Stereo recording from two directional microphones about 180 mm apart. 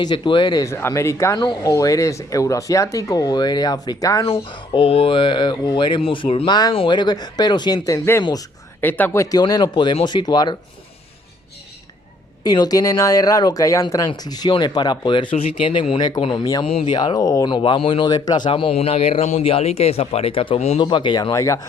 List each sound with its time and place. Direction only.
0.0 s speech: 25° left (ahead or behind)
4.3 s speech: 30° left (ahead or behind)
12.4 s speech: 20° left (ahead or behind)